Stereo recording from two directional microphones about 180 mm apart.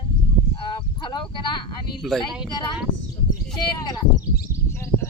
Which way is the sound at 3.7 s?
20° left (ahead or behind).